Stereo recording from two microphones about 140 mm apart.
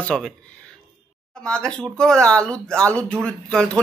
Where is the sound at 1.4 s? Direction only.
5° left (ahead or behind).